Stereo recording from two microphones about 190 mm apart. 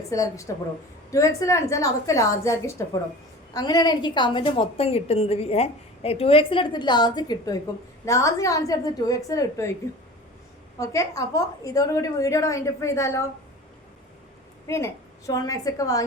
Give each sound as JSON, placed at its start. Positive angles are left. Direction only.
{"t": 0.1, "sound": "a woman's voice", "side_deg": 15}
{"t": 10.8, "sound": "a woman's voice", "side_deg": 15}
{"t": 15.3, "sound": "a woman's voice", "side_deg": 20}